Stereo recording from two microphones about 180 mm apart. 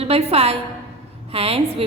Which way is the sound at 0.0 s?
35° right (ahead or behind).